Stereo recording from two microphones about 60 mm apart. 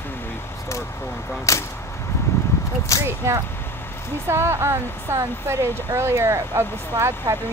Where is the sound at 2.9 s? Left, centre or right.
Left.